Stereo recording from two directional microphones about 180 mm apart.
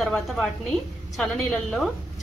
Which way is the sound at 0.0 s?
5° left (ahead or behind).